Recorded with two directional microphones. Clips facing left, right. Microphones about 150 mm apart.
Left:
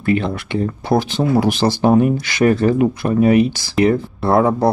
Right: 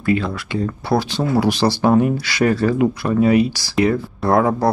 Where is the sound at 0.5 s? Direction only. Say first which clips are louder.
Left 2 dB; 20° left (ahead or behind).